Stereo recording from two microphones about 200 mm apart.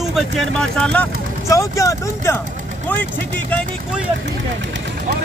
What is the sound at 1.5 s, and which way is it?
Speech, 15° left (ahead or behind).